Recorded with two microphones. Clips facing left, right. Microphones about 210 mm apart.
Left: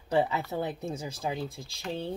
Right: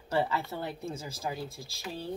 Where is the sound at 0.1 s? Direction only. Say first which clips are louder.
Left 3 dB; 20° left (ahead or behind).